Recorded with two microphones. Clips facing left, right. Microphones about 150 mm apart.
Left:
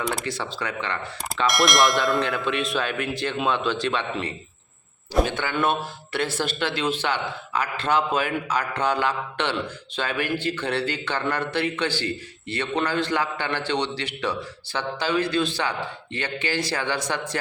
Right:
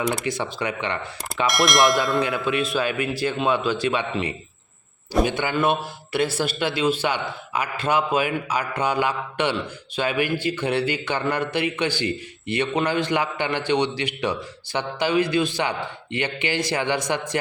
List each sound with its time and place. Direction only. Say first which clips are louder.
0.0 s speech: right 3 dB; centre (ahead or behind)
0.3 s a man's voice: right 4 dB; 15° right (ahead or behind)
1.5 s a man's voice: right 1 dB; centre (ahead or behind); by 17.3 s 15° right (ahead or behind)